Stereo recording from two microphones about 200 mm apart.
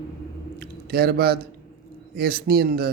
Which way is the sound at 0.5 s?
50° right (ahead or behind).